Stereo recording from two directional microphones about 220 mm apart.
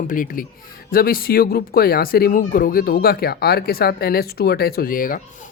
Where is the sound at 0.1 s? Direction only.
40° left (ahead or behind).